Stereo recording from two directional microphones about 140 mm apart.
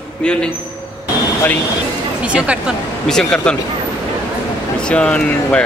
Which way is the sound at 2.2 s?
10° right (ahead or behind).